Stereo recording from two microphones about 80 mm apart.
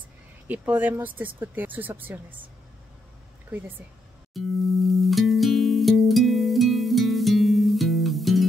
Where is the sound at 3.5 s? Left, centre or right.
Right.